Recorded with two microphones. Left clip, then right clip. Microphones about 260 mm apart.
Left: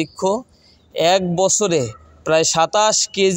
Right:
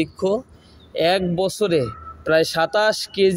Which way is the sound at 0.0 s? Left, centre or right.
Left.